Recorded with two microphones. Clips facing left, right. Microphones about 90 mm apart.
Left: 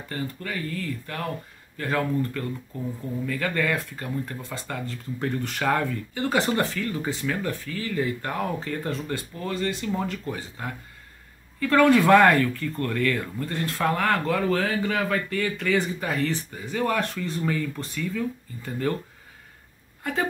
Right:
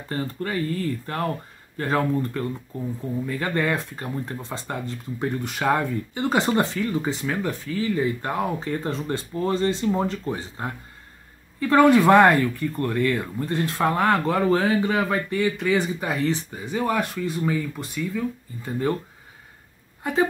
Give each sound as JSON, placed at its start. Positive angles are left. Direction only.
{"t": 0.1, "sound": "speech", "side_deg": -35}
{"t": 20.0, "sound": "speech", "side_deg": -20}